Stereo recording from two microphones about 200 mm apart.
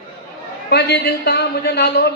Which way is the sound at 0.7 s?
55° left (ahead or behind).